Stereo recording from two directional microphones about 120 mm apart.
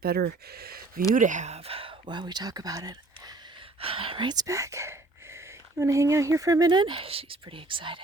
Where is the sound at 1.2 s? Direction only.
90° right; by 3.3 s 30° right (ahead or behind).